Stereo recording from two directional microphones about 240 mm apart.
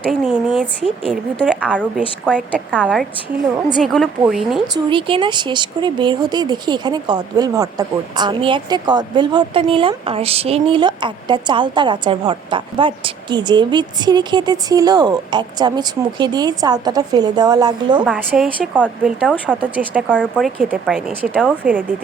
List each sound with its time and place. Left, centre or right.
0.1 s speech: centre
4.7 s speech: right
18.0 s speech: centre
20.1 s speech: centre